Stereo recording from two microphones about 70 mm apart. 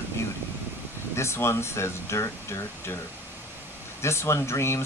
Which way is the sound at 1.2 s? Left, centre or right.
Left.